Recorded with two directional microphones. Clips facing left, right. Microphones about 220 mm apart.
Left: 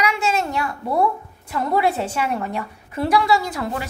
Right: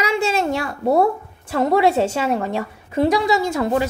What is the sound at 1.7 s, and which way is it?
A woman's voice, 25° right (ahead or behind).